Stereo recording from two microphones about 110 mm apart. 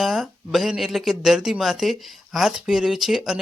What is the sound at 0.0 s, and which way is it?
Speech, centre (ahead or behind).